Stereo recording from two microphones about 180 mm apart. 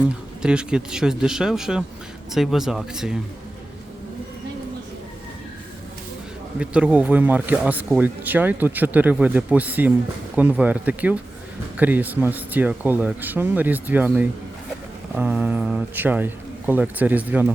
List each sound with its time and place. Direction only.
0.4 s speech: 5° right (ahead or behind)
6.6 s speech: 5° right (ahead or behind)